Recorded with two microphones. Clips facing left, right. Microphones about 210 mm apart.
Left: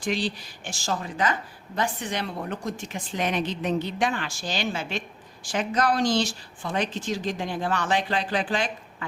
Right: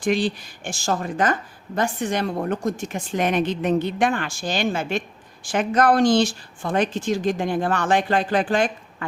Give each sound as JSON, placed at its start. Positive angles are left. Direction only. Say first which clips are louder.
{"t": 0.0, "sound": "speech", "louder": "right 6 dB", "side_deg": -50}